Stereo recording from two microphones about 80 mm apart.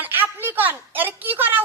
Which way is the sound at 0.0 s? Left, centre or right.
Right.